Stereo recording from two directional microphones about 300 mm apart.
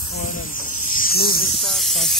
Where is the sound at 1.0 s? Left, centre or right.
Left.